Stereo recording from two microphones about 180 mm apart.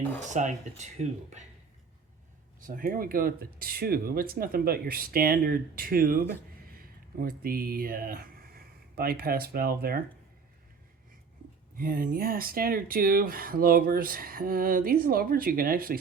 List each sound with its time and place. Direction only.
0.2 s speech: 40° right (ahead or behind)
2.6 s speech: 50° right (ahead or behind)
11.8 s speech: 50° right (ahead or behind)